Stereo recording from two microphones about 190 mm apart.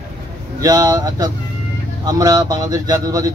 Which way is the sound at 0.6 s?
20° right (ahead or behind).